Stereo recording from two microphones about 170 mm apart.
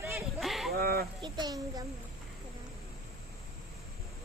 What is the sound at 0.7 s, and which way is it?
Speech, 65° right (ahead or behind).